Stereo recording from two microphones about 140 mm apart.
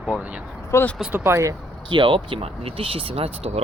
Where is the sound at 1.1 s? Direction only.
15° right (ahead or behind).